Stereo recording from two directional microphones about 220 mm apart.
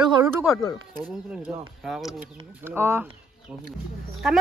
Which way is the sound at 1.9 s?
Centre (ahead or behind).